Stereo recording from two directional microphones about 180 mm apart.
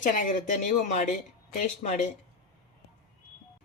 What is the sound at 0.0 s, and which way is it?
Speech, 45° left (ahead or behind).